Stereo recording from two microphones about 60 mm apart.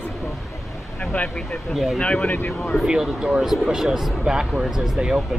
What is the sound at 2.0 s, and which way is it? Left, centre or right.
Speech, centre.